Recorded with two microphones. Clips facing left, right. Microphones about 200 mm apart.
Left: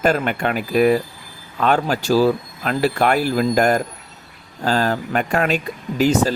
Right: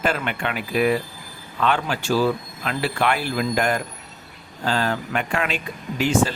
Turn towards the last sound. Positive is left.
turn(degrees=40)  # may be behind; listen again after turning